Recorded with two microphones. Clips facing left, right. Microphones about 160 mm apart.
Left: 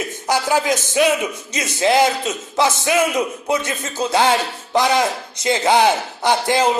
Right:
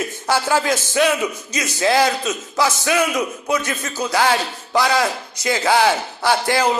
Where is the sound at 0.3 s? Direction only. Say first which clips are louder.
Left 1 dB; 15° left (ahead or behind).